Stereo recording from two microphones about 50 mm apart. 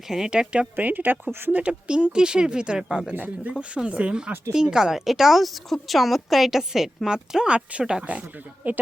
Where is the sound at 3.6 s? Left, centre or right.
Right.